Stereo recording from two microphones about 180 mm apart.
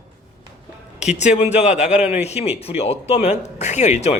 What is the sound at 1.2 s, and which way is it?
A man's voice, 40° left (ahead or behind).